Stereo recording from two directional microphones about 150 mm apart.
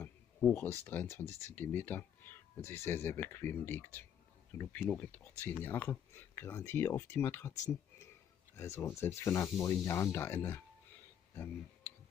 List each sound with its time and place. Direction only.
0.0 s speech: 10° left (ahead or behind)
8.5 s speech: 15° left (ahead or behind)